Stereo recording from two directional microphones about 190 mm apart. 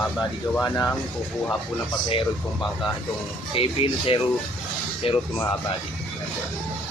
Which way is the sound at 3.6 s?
30° left (ahead or behind).